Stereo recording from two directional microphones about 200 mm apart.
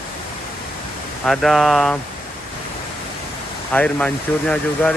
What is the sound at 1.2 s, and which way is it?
Speech, centre (ahead or behind).